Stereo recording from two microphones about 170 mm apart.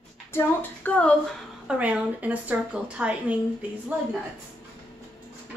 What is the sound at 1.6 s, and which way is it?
A woman's voice, 10° right (ahead or behind).